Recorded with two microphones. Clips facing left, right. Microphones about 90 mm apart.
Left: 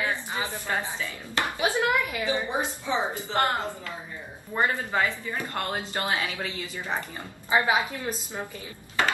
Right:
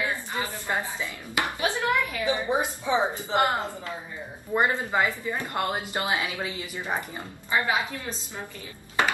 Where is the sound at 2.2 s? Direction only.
20° right (ahead or behind).